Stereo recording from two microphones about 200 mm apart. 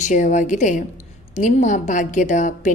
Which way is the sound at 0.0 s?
40° left (ahead or behind).